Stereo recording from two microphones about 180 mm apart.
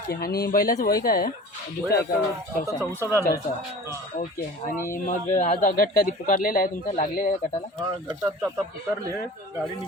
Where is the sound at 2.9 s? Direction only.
10° left (ahead or behind).